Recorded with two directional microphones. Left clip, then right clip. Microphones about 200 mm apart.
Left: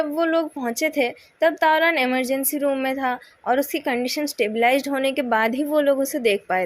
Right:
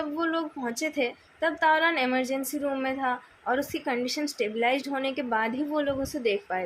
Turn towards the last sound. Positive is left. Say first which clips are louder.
# left 7 dB
turn(degrees=45)  # may be behind; listen again after turning